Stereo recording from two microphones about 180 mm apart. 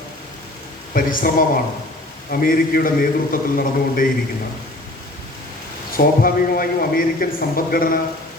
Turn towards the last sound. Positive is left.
turn(degrees=50)  # may be behind; listen again after turning